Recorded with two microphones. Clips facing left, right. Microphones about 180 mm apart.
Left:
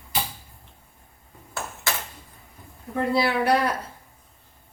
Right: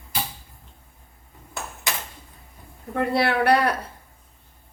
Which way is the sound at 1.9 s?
15° right (ahead or behind).